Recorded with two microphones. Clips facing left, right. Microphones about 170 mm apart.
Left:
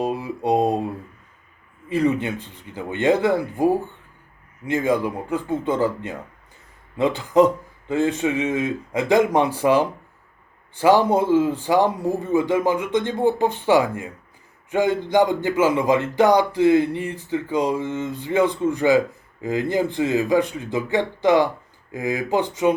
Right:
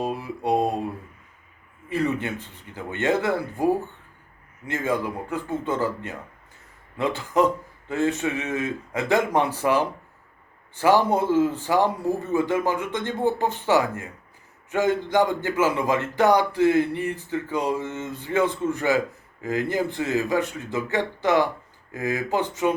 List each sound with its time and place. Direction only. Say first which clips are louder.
0.0 s speech: left 3 dB; 20° left (ahead or behind)
1.9 s speech: left 4 dB; 15° left (ahead or behind)